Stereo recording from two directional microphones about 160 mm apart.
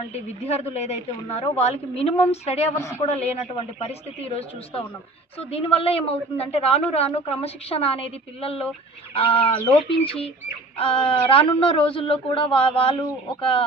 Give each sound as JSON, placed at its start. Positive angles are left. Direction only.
{"t": 0.0, "sound": "speech", "side_deg": 40}
{"t": 5.5, "sound": "speech", "side_deg": 40}